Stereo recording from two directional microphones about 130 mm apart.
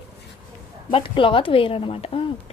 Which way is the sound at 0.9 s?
40° left (ahead or behind).